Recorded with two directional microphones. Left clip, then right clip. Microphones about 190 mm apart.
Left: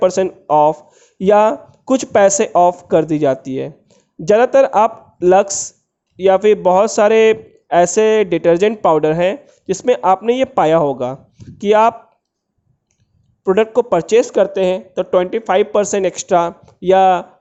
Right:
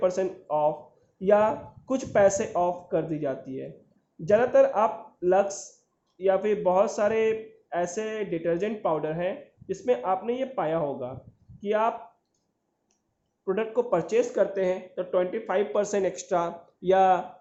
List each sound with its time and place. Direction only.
0.0 s speech: 50° left (ahead or behind)
13.4 s speech: 50° left (ahead or behind)